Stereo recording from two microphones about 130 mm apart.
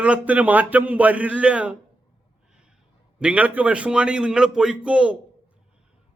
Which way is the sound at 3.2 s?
10° right (ahead or behind).